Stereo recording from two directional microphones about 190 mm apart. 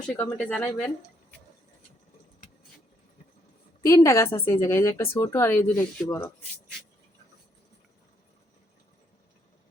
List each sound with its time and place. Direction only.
0.2 s speech: 5° left (ahead or behind)
3.8 s speech: 15° left (ahead or behind)